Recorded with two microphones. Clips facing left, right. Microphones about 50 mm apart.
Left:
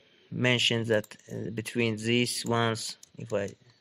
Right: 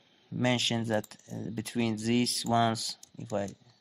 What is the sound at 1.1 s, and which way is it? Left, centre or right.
Speech, left.